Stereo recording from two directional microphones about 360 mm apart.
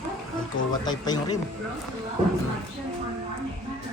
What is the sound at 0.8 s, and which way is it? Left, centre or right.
Speech, centre.